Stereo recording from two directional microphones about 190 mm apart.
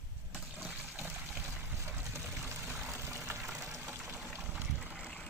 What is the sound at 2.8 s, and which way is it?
Water, 15° right (ahead or behind).